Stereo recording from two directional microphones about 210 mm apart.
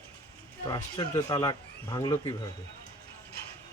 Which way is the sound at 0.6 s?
20° left (ahead or behind).